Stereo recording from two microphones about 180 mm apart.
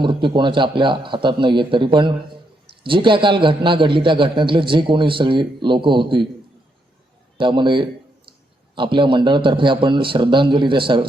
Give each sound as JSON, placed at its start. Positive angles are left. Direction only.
{"t": 0.0, "sound": "a man's voice", "side_deg": -25}
{"t": 7.3, "sound": "a man's voice", "side_deg": -25}